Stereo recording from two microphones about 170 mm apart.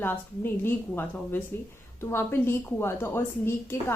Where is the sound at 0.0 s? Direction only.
10° left (ahead or behind).